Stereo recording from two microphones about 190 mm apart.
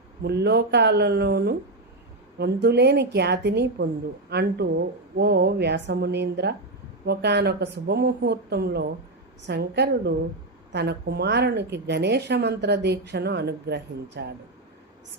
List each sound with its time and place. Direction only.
0.2 s a woman's voice: 60° right (ahead or behind)